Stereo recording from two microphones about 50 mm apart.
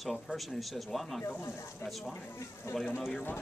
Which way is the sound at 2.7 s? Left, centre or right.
Left.